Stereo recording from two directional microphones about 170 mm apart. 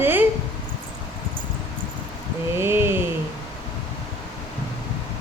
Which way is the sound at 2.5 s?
15° right (ahead or behind).